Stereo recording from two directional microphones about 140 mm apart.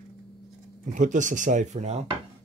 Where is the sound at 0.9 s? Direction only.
65° right (ahead or behind).